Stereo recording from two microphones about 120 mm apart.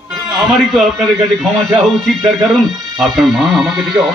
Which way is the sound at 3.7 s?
30° right (ahead or behind).